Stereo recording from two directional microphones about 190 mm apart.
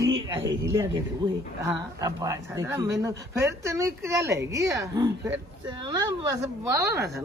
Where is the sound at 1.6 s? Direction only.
15° right (ahead or behind).